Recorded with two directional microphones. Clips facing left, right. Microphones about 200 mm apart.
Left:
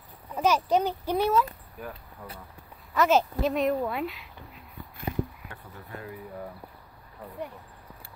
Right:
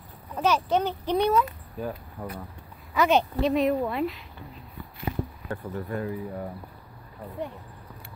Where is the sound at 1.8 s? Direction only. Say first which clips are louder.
Right 7 dB; 30° right (ahead or behind).